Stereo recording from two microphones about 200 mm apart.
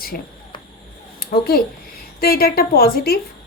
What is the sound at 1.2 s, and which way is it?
A woman's voice, 50° left (ahead or behind).